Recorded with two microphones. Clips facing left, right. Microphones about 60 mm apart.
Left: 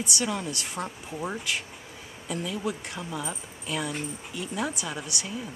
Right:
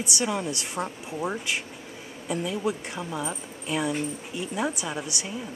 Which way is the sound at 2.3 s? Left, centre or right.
Centre.